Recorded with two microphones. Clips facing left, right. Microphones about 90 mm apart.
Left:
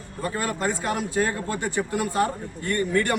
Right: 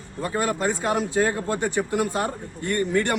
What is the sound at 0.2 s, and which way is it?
A man's voice, 25° right (ahead or behind).